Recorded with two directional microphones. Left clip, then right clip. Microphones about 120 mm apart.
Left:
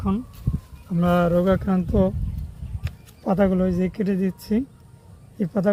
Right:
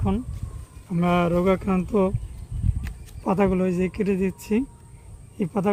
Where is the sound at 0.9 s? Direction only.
20° right (ahead or behind).